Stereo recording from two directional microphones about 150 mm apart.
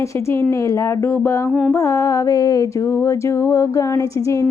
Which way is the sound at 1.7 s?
20° left (ahead or behind).